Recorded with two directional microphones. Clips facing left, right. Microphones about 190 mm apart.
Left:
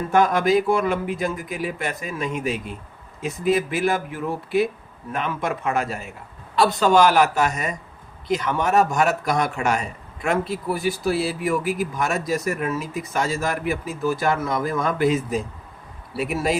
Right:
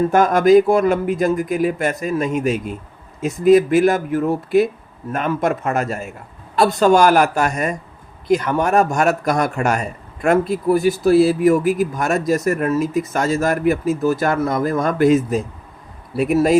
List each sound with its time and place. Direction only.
0.1 s speech: 45° right (ahead or behind)